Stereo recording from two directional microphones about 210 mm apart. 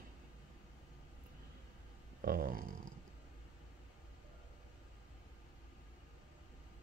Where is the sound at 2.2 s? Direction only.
45° right (ahead or behind).